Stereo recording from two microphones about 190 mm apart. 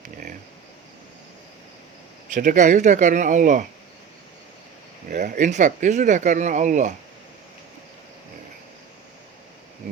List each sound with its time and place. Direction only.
2.3 s speech: 40° right (ahead or behind)
5.0 s speech: 45° right (ahead or behind)